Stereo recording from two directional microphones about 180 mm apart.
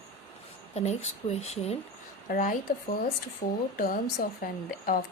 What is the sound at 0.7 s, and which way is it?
Speech, 40° left (ahead or behind).